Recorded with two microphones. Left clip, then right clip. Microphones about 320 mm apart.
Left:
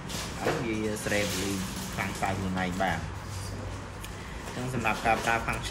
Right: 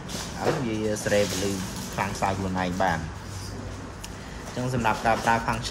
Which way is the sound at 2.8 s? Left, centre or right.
Right.